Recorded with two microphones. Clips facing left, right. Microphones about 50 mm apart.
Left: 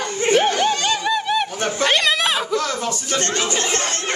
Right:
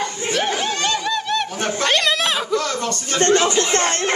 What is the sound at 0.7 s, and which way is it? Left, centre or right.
Snicker, centre.